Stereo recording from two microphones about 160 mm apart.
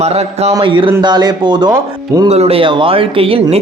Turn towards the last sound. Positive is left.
turn(degrees=-35)  # may be behind; listen again after turning